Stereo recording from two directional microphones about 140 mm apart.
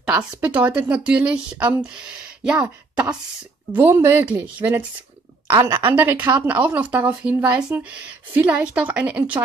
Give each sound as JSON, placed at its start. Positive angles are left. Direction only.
{"t": 0.1, "sound": "speech", "side_deg": -10}